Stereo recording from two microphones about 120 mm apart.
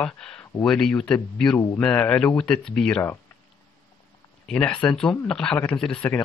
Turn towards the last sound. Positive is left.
turn(degrees=10)  # may be behind; listen again after turning